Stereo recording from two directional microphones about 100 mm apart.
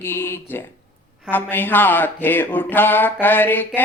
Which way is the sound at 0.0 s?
25° left (ahead or behind).